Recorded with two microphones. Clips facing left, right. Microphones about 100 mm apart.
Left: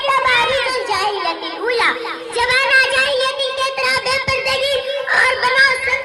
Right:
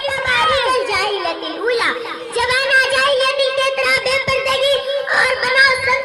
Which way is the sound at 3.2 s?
55° right (ahead or behind).